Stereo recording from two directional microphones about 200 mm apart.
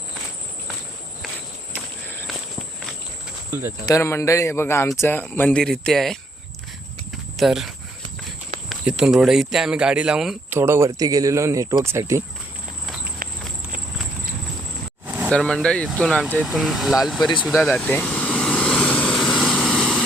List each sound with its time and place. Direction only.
3.8 s speech: 15° left (ahead or behind)
7.3 s speech: centre (ahead or behind)
8.7 s speech: 5° right (ahead or behind)
15.0 s vehicle: 10° right (ahead or behind)
15.3 s speech: 5° left (ahead or behind)
17.2 s speech: 20° left (ahead or behind)
17.5 s vehicle: 5° left (ahead or behind)